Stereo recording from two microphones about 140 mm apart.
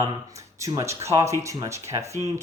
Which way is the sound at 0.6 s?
20° right (ahead or behind).